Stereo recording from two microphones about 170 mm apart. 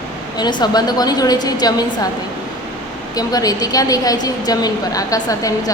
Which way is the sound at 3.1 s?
20° left (ahead or behind).